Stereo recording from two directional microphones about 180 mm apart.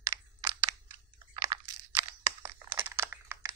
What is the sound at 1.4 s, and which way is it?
Crunch, 15° right (ahead or behind).